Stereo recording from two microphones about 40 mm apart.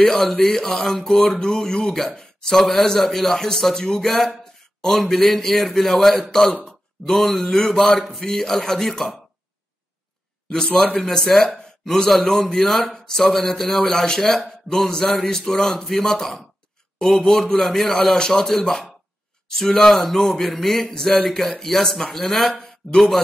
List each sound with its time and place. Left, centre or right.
0.1 s a man's voice: centre
11.1 s a man's voice: centre